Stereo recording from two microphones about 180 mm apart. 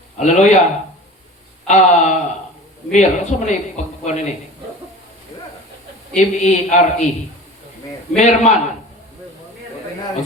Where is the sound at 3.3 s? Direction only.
40° left (ahead or behind).